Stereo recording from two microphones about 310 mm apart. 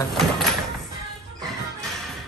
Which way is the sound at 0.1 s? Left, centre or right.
Centre.